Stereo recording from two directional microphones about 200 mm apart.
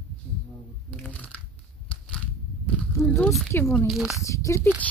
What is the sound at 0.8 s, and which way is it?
Shuffling cards, 5° left (ahead or behind).